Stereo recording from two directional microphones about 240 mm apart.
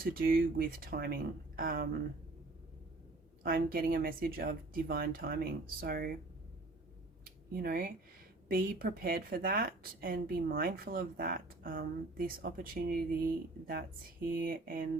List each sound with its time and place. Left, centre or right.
0.0 s speech: right
3.4 s speech: right
7.5 s speech: right